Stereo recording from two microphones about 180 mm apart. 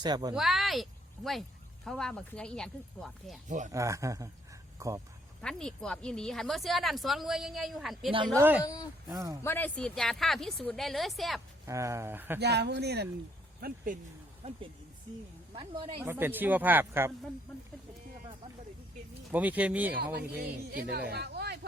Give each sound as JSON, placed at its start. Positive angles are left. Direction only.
{"t": 0.0, "sound": "a woman's voice", "side_deg": -25}
{"t": 0.3, "sound": "speech", "side_deg": 0}
{"t": 3.7, "sound": "speech", "side_deg": -15}
{"t": 5.4, "sound": "a woman's voice", "side_deg": 5}
{"t": 8.6, "sound": "speech", "side_deg": 20}
{"t": 9.0, "sound": "a woman's voice", "side_deg": -20}
{"t": 9.4, "sound": "a woman's voice", "side_deg": 10}
{"t": 11.6, "sound": "speech", "side_deg": -15}
{"t": 12.4, "sound": "speech", "side_deg": -70}
{"t": 14.4, "sound": "a woman's voice", "side_deg": -35}
{"t": 16.0, "sound": "speech", "side_deg": -10}
{"t": 17.5, "sound": "a woman's voice", "side_deg": 5}
{"t": 19.3, "sound": "speech", "side_deg": -10}
{"t": 20.1, "sound": "speech", "side_deg": -60}